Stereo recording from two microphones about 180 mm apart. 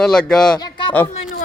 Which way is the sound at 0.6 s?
25° left (ahead or behind).